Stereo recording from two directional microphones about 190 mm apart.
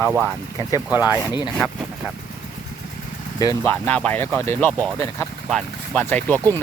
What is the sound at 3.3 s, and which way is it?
Speech, 20° left (ahead or behind).